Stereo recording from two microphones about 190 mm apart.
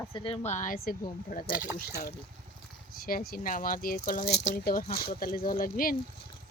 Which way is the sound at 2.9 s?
50° left (ahead or behind).